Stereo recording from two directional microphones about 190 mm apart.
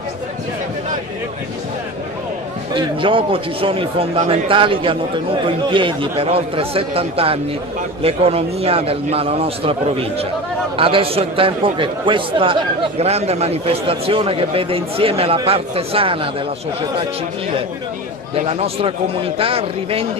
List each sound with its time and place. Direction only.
2.7 s a man's voice: 25° right (ahead or behind)
18.3 s speech: 30° right (ahead or behind)